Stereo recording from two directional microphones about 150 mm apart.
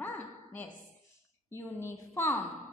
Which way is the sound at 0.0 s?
15° left (ahead or behind).